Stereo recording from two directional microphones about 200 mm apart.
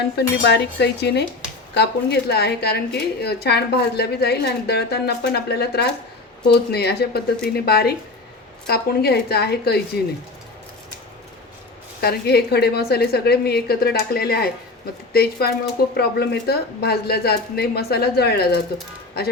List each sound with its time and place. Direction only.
0.2 s a woman's voice: 60° left (ahead or behind)
11.9 s speech: 50° left (ahead or behind)